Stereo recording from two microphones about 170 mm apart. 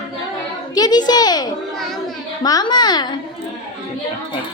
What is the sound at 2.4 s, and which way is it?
Speech, 25° left (ahead or behind).